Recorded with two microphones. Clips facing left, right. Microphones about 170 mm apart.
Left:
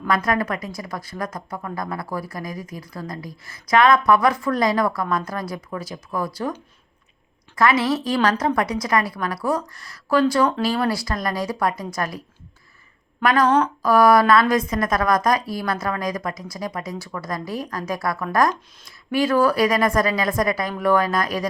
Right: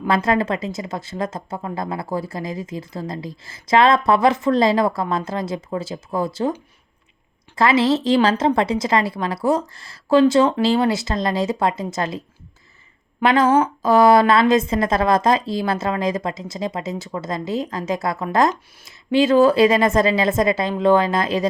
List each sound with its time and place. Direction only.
0.1 s a woman's voice: 25° right (ahead or behind)